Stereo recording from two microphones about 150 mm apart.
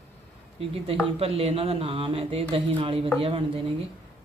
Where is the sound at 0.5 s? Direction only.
40° right (ahead or behind).